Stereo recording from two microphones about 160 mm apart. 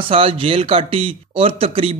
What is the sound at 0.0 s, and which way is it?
Speech, 35° right (ahead or behind).